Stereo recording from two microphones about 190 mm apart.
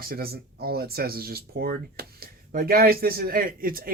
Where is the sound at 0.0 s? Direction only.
50° right (ahead or behind).